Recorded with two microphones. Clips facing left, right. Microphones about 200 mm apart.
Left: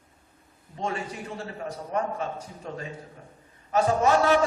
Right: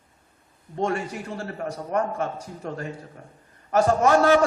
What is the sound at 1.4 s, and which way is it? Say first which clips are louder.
A man's voice: right 4 dB; 70° right (ahead or behind).